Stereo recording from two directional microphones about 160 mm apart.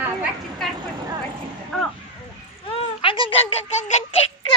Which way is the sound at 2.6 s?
35° left (ahead or behind).